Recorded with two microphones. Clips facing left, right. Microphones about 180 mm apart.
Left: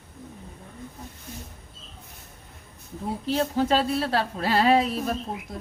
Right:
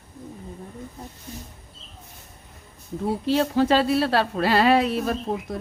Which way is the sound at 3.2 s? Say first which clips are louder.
Right 3 dB; 80° right.